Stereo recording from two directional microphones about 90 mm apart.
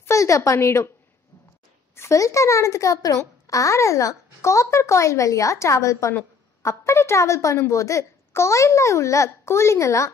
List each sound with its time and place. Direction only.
0.0 s a woman's voice: 35° left (ahead or behind)
2.0 s a woman's voice: 35° left (ahead or behind)